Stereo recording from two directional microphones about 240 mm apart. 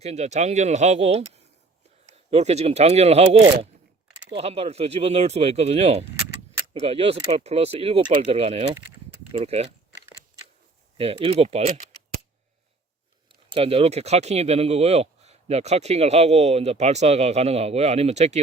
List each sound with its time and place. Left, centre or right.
0.0 s speech: right
10.9 s speech: right
13.2 s speech: right